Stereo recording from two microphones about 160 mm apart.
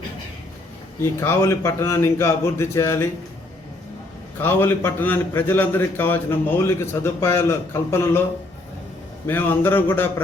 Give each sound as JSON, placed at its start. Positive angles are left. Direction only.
{"t": 1.2, "sound": "a man's voice", "side_deg": 15}
{"t": 4.4, "sound": "a man's voice", "side_deg": 15}
{"t": 9.2, "sound": "a man's voice", "side_deg": 15}